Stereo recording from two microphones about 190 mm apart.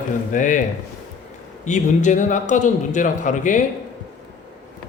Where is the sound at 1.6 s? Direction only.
40° left (ahead or behind).